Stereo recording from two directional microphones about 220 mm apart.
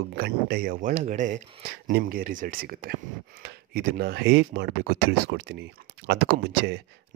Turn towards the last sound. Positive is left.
turn(degrees=-50)  # may be behind; listen again after turning